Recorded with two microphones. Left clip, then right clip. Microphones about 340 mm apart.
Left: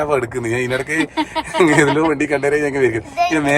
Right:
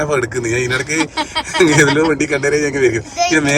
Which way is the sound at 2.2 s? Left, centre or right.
Left.